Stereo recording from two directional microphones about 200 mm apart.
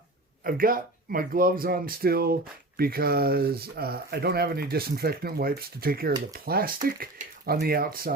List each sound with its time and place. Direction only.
0.4 s speech: 45° right (ahead or behind)